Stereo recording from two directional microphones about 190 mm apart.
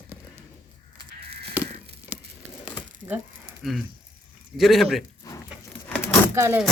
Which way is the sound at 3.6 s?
Centre (ahead or behind).